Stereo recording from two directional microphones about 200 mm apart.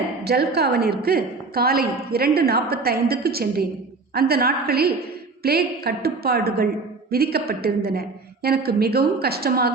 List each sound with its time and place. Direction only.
0.3 s a woman's voice: 55° right (ahead or behind)